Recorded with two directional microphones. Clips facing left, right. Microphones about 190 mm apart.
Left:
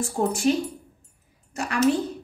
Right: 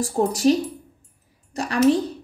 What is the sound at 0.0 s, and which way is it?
A woman's voice, 35° right (ahead or behind).